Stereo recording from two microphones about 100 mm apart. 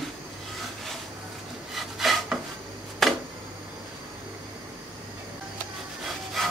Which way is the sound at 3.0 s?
Centre (ahead or behind).